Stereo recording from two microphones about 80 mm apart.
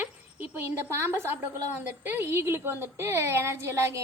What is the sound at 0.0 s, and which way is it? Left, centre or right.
A woman's voice, right.